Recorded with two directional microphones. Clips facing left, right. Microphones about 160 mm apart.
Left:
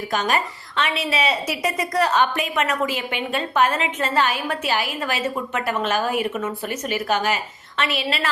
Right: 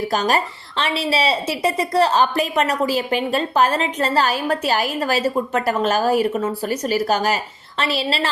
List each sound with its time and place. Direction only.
0.1 s a woman's voice: 35° right (ahead or behind)